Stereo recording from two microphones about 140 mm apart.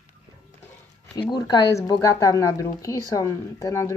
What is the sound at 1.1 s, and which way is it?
Speech, 30° left (ahead or behind).